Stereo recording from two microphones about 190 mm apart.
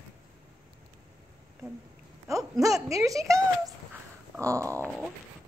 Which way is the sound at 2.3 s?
15° right (ahead or behind).